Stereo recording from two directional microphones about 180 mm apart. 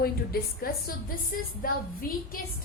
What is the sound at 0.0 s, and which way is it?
A woman's voice, 55° left (ahead or behind).